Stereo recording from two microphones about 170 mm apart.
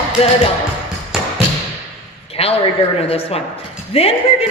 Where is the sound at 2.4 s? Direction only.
35° left (ahead or behind).